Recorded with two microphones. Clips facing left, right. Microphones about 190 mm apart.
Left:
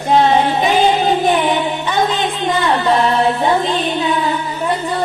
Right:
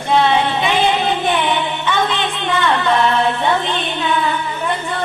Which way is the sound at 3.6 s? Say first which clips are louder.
Left 4 dB; 40° left (ahead or behind).